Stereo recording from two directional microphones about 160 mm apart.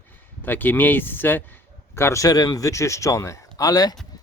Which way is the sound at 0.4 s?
10° left (ahead or behind).